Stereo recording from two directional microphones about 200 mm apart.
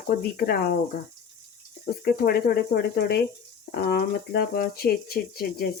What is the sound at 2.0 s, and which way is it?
Speech, 50° left (ahead or behind).